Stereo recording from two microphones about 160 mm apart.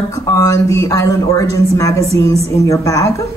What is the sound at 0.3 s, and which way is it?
Speech, 20° left (ahead or behind).